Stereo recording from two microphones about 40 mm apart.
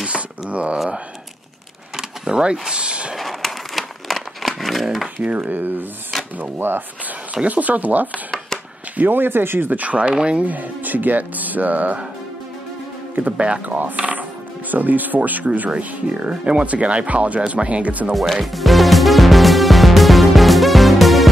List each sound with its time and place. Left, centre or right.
0.0 s wail: right
2.0 s a sound: centre
2.7 s speech: right
3.2 s crumpling: centre
5.2 s speech: right
6.1 s drawer open or close: centre
7.4 s speech: right
8.9 s speech: right
9.7 s speech: right
10.4 s speech: right
13.2 s speech: right
13.7 s speech: right
18.1 s music: centre